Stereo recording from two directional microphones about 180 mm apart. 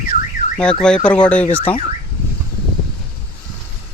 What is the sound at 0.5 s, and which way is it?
Fowl, 5° left (ahead or behind).